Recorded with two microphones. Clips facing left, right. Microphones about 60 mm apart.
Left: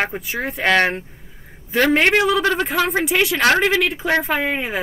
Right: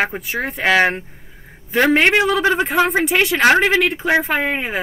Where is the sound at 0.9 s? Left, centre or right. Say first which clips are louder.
Right 2 dB; right.